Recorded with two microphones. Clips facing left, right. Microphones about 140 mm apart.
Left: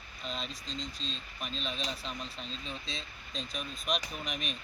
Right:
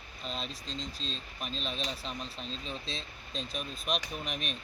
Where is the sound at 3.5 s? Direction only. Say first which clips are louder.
Even; 5° right (ahead or behind).